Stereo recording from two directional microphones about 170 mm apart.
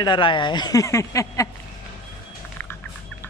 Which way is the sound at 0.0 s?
30° left (ahead or behind).